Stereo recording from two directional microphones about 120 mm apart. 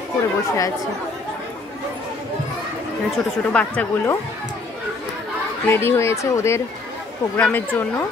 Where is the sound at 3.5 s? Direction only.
10° left (ahead or behind).